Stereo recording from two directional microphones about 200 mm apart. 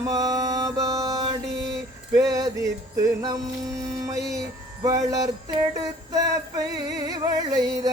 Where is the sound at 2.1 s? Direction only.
15° right (ahead or behind).